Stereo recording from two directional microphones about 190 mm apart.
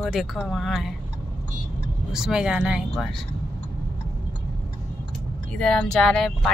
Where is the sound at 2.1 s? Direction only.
5° right (ahead or behind).